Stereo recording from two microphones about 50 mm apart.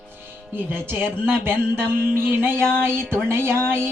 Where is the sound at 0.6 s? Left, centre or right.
Right.